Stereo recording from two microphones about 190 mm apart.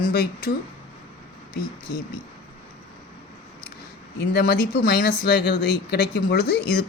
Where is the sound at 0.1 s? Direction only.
55° left (ahead or behind).